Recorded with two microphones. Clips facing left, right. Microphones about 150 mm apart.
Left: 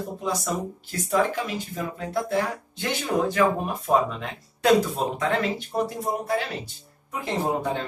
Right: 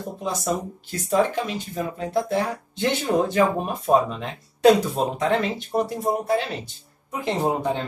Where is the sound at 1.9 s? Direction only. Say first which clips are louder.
Right 2 dB; 25° right (ahead or behind).